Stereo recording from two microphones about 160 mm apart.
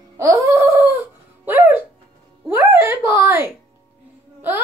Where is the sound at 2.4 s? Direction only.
15° right (ahead or behind).